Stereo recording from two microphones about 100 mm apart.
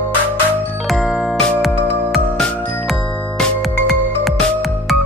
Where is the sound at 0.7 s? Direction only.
Centre (ahead or behind).